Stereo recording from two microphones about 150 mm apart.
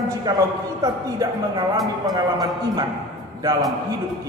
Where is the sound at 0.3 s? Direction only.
25° right (ahead or behind).